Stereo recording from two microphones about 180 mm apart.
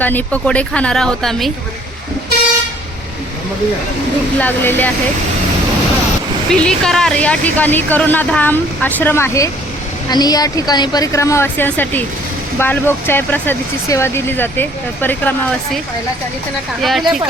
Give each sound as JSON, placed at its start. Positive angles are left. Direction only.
{"t": 0.0, "sound": "speech", "side_deg": 10}
{"t": 4.4, "sound": "speech", "side_deg": 10}
{"t": 6.5, "sound": "a woman's voice", "side_deg": 5}
{"t": 16.8, "sound": "speech", "side_deg": 0}